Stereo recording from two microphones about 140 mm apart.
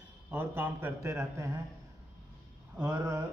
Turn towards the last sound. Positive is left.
turn(degrees=-20)  # may be behind; listen again after turning